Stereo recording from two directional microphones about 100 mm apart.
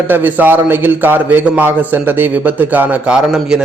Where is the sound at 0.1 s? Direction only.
20° right (ahead or behind).